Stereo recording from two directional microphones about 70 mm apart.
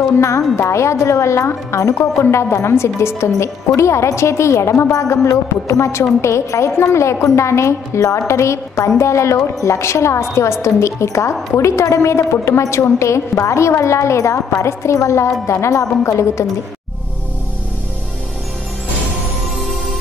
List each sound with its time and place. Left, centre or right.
0.6 s a woman's voice: left